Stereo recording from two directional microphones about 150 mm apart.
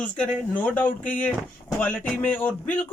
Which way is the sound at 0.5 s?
10° left (ahead or behind).